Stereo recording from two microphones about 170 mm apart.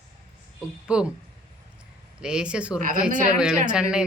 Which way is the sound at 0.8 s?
5° right (ahead or behind).